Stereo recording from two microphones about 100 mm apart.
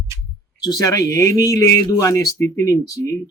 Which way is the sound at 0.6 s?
35° left (ahead or behind).